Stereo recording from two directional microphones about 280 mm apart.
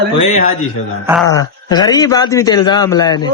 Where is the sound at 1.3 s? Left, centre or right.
Centre.